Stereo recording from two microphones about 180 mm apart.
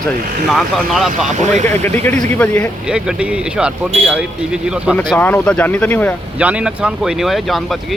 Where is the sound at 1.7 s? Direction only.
10° left (ahead or behind).